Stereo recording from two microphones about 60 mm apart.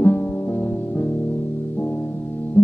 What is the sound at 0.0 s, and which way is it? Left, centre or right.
Music, left.